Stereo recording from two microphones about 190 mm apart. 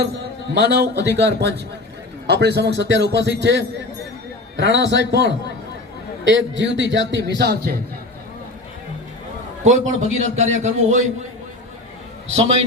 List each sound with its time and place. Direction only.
0.5 s a man's voice: 60° right (ahead or behind)
9.6 s a man's voice: 40° right (ahead or behind)
12.3 s a man's voice: 35° right (ahead or behind)